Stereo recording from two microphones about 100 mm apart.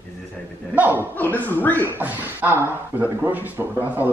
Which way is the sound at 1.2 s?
20° left (ahead or behind).